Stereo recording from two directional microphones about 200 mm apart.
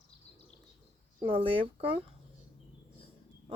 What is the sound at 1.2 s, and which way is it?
Speech, 25° right (ahead or behind).